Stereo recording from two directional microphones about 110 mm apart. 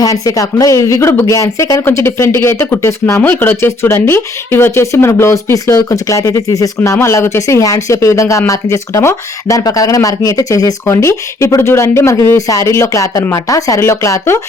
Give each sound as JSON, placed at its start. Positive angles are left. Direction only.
{"t": 0.0, "sound": "speech", "side_deg": 30}